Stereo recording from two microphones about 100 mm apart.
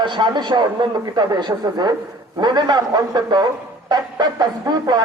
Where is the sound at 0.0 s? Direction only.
50° right (ahead or behind).